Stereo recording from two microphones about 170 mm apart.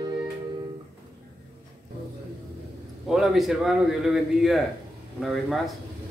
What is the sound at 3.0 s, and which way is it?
Speech, centre (ahead or behind).